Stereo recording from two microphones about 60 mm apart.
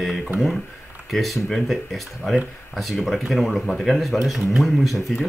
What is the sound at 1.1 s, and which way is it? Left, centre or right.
Speech, centre.